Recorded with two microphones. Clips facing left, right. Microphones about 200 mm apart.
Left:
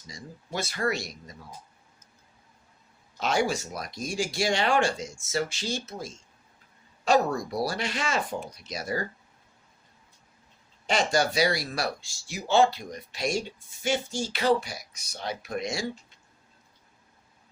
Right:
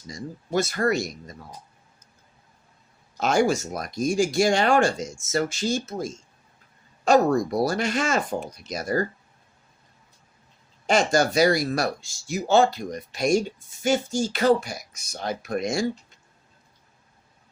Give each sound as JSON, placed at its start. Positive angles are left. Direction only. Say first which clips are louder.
{"t": 0.1, "sound": "speech", "louder": "right 10 dB", "side_deg": -45}
{"t": 3.2, "sound": "speech", "louder": "right 5 dB", "side_deg": -45}
{"t": 10.8, "sound": "speech", "louder": "right 4 dB", "side_deg": -45}